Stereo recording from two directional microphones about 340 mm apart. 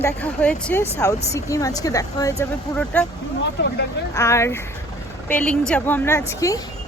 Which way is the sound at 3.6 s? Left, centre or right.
Left.